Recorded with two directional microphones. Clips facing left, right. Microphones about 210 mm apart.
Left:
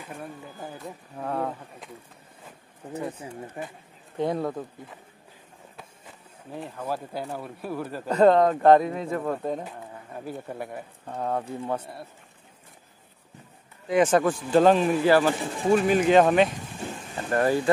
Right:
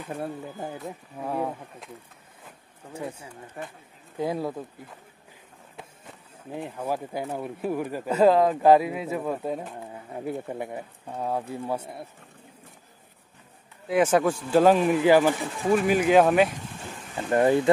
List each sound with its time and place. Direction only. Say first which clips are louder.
0.7 s speech: right 1 dB; 5° right (ahead or behind)
2.9 s speech: left 3 dB; 10° right (ahead or behind)
6.6 s speech: right 2 dB; 10° right (ahead or behind)
10.1 s speech: right 4 dB; 20° right (ahead or behind)
13.8 s speech: left 1 dB; 5° right (ahead or behind)
17.3 s speech: right 3 dB; 20° right (ahead or behind)